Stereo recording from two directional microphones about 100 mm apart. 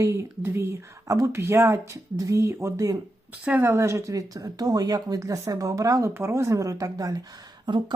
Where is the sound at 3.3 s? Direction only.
15° right (ahead or behind).